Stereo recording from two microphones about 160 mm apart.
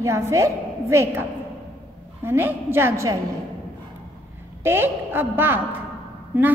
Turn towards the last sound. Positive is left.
turn(degrees=-10)  # may be behind; listen again after turning